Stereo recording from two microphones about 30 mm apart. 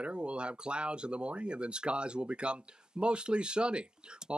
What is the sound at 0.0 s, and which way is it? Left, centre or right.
Speech, right.